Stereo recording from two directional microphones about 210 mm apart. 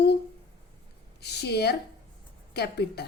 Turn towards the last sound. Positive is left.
turn(degrees=50)  # may be behind; listen again after turning